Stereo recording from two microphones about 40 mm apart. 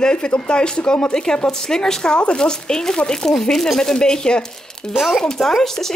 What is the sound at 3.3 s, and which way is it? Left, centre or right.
A woman's voice, centre.